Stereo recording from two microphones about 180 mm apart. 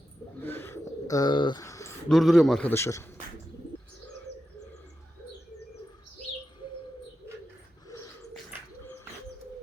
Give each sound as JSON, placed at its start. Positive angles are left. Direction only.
{"t": 0.4, "sound": "bird", "side_deg": 10}
{"t": 2.0, "sound": "a man's voice", "side_deg": 0}
{"t": 7.9, "sound": "a sound", "side_deg": 15}